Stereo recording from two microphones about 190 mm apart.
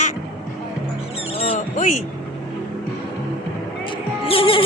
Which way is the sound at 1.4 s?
35° left (ahead or behind).